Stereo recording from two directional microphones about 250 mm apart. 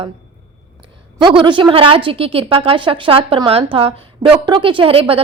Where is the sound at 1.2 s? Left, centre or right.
Centre.